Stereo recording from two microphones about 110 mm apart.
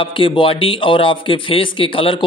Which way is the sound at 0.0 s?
50° left (ahead or behind).